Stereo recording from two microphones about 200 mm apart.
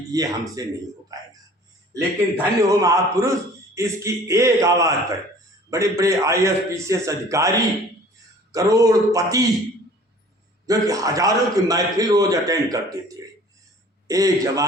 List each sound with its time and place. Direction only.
0.1 s a man's voice: 20° right (ahead or behind)
10.7 s a man's voice: 15° right (ahead or behind)